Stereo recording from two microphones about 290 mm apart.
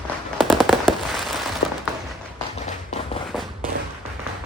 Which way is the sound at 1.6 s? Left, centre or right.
Left.